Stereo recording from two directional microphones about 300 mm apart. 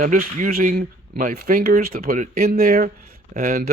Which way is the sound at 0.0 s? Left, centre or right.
Right.